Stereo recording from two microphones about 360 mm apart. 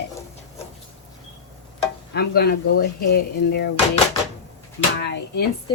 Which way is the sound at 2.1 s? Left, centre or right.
Left.